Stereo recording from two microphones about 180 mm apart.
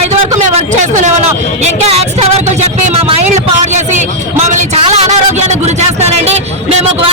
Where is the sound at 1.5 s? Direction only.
35° right (ahead or behind).